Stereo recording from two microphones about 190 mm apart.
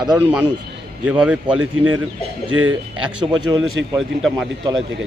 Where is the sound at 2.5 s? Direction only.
90° right.